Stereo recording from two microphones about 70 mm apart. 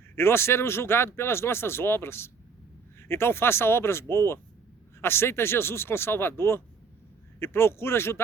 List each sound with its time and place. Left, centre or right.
0.2 s speech: left